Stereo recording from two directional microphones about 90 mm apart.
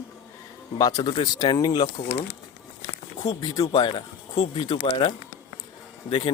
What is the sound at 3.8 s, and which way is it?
Speech, 65° left (ahead or behind).